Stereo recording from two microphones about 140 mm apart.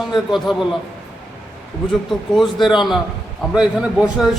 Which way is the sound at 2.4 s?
Centre (ahead or behind).